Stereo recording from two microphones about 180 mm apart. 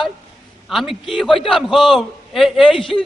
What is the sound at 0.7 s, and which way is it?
A man's voice, centre (ahead or behind).